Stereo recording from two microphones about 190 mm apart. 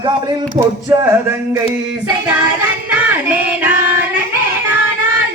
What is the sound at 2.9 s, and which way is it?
Child singing, 5° right (ahead or behind).